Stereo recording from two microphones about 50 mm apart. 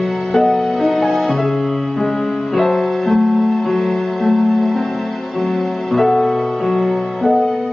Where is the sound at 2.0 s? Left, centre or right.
Left.